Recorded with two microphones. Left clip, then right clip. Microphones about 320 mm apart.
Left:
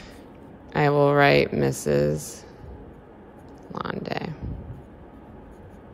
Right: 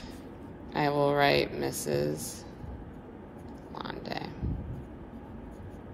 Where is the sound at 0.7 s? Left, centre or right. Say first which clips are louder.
Left 7 dB; left.